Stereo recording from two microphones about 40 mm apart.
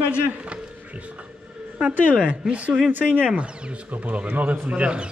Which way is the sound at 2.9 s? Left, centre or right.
Right.